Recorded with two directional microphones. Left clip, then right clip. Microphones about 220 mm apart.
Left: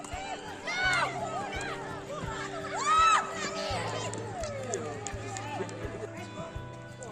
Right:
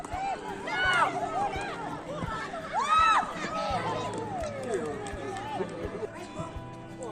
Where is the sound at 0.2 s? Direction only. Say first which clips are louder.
Right 8 dB; 50° left (ahead or behind).